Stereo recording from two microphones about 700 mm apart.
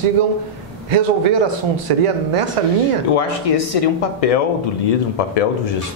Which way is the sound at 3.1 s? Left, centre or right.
Left.